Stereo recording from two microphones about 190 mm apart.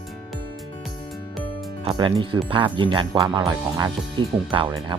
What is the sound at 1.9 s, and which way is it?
Speech, 25° right (ahead or behind).